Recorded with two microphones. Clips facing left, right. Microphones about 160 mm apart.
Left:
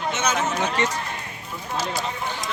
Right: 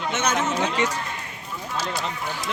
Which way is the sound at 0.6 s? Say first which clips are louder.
Even; 10° right (ahead or behind).